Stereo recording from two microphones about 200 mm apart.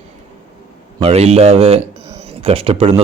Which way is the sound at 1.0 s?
30° right (ahead or behind).